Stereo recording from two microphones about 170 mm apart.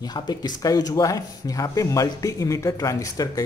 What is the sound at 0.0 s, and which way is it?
Speech, 25° left (ahead or behind).